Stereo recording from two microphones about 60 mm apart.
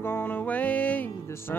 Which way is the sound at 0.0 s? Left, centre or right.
Left.